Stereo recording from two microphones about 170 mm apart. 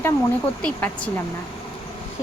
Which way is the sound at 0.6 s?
5° left (ahead or behind).